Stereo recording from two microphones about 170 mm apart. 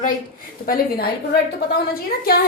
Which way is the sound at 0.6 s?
60° left (ahead or behind).